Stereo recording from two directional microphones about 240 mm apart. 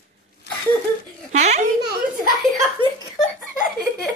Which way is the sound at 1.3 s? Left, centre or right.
Right.